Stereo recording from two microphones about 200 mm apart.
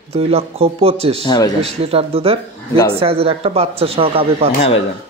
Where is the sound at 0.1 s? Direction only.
30° right (ahead or behind).